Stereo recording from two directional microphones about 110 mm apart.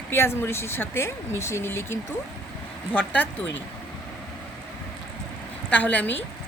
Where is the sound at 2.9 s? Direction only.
15° left (ahead or behind).